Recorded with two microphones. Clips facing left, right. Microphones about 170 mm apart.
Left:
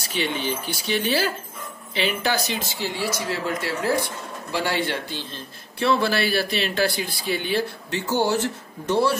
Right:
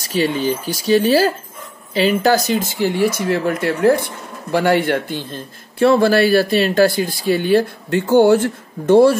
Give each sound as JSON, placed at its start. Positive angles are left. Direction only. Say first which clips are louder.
{"t": 0.0, "sound": "speech", "louder": "right 8 dB", "side_deg": -40}